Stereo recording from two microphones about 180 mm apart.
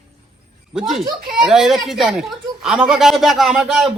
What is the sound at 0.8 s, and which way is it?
A man's voice, centre (ahead or behind).